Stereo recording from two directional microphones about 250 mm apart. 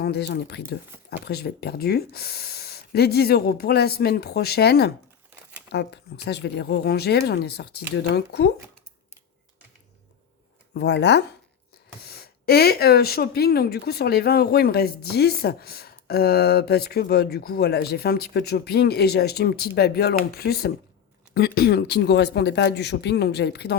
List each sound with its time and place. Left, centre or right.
0.0 s speech: left
10.8 s speech: left